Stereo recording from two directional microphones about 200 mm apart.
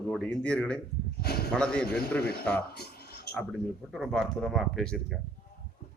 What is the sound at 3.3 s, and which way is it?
Speech, 5° left (ahead or behind).